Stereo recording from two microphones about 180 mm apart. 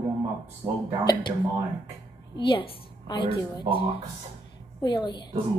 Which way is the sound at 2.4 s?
30° left (ahead or behind).